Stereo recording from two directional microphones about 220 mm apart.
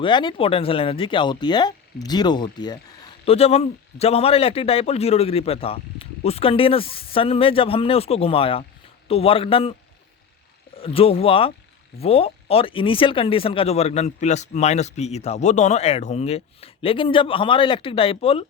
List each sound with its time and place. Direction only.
0.0 s speech: 20° left (ahead or behind)
10.8 s speech: 25° left (ahead or behind)